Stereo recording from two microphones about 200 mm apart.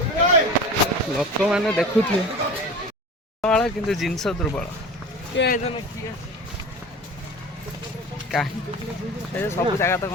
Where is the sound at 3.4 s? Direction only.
5° left (ahead or behind).